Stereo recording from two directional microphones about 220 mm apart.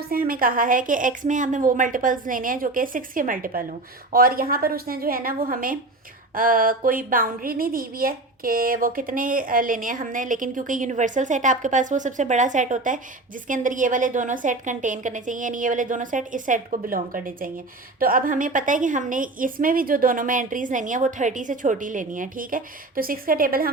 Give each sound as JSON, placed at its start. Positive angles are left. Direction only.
{"t": 0.1, "sound": "a woman's voice", "side_deg": -40}